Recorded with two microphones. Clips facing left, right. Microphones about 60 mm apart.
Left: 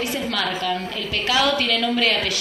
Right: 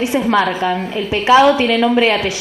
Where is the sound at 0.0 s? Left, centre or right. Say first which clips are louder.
Right 10 dB; right.